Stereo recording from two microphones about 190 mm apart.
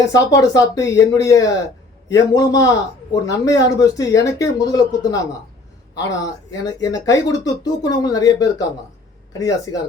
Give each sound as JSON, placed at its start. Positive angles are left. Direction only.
{"t": 0.1, "sound": "speech", "side_deg": 20}